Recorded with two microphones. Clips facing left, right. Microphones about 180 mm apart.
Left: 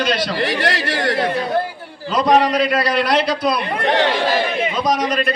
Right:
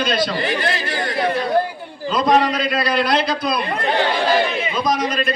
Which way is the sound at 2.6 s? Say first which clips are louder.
Left 1 dB; 75° left (ahead or behind).